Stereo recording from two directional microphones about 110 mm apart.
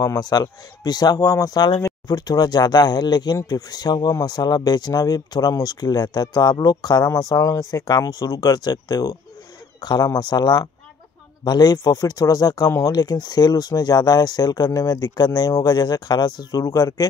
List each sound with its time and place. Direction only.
0.0 s speech: 35° left (ahead or behind)